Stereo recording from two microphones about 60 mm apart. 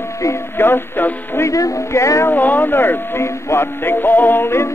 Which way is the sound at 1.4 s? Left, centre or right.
Left.